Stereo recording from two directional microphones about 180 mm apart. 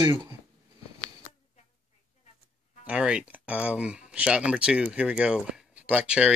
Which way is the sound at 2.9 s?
5° right (ahead or behind).